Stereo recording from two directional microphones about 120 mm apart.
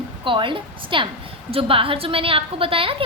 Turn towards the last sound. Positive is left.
turn(degrees=-50)  # may be behind; listen again after turning